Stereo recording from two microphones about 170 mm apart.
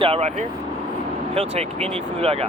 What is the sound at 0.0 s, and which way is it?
Speech, 35° right (ahead or behind).